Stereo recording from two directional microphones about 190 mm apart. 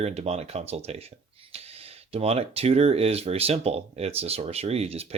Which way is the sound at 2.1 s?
30° right (ahead or behind).